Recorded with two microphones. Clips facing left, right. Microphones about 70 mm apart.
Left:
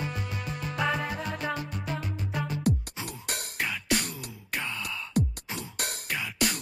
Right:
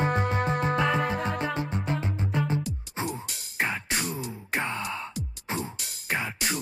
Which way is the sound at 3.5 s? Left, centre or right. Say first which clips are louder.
Right 1 dB; right.